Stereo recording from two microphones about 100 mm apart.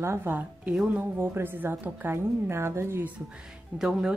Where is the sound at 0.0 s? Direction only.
25° right (ahead or behind).